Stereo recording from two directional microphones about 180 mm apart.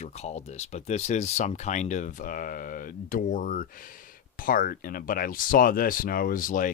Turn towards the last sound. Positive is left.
turn(degrees=50)  # may be behind; listen again after turning